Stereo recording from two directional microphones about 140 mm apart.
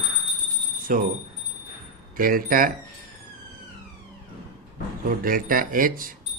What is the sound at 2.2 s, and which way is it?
Speech, 90° right.